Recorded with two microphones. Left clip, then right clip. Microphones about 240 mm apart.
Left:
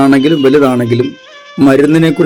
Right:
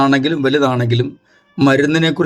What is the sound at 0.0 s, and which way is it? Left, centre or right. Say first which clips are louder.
A man's voice: left 6 dB; centre.